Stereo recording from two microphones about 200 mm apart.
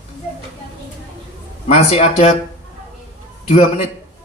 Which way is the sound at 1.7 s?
30° left (ahead or behind).